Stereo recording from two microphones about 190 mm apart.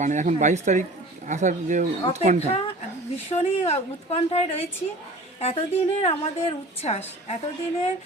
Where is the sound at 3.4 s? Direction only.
35° left (ahead or behind).